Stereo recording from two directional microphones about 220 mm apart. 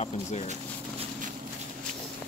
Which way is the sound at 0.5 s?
30° right (ahead or behind).